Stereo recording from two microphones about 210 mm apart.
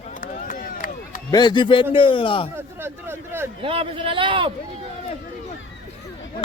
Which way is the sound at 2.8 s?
10° right (ahead or behind).